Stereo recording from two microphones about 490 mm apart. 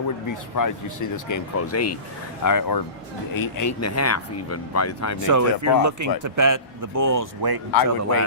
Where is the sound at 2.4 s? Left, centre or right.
Left.